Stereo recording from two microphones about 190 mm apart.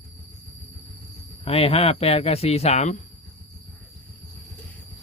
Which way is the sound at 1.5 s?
30° left (ahead or behind).